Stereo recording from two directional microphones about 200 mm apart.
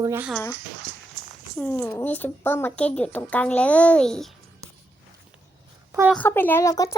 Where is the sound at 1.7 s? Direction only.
10° left (ahead or behind).